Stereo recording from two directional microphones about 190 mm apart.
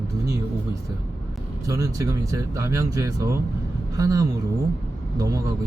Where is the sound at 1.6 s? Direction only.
15° right (ahead or behind).